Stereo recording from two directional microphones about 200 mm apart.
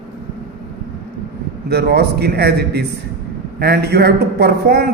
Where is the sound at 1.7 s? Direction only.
55° right (ahead or behind).